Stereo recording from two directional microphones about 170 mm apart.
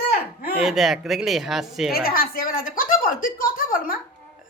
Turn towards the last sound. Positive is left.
turn(degrees=55)  # may be behind; listen again after turning